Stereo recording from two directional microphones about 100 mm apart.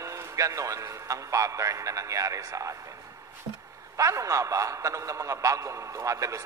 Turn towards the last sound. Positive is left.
turn(degrees=-35)  # may be behind; listen again after turning